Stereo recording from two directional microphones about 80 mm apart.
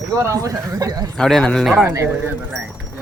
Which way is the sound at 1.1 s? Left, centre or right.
Centre.